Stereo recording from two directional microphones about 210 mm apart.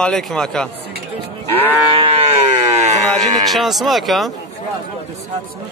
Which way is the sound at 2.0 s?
25° right (ahead or behind).